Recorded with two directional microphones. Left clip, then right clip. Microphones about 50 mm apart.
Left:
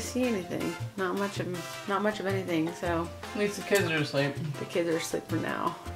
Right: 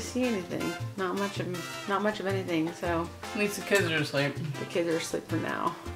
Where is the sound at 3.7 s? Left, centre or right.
Right.